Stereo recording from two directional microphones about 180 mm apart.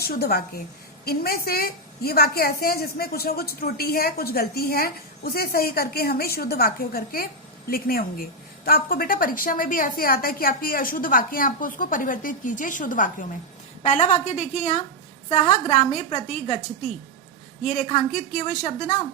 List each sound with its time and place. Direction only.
0.0 s a woman's voice: 60° left (ahead or behind); by 16.6 s 40° left (ahead or behind)
17.6 s a woman's voice: 45° left (ahead or behind)